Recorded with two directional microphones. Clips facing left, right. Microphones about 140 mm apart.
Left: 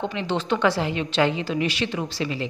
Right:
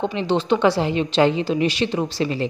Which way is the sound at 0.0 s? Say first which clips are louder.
Right 5 dB; 25° right (ahead or behind).